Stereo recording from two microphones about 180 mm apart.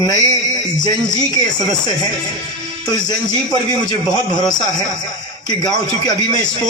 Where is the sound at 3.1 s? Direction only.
20° left (ahead or behind).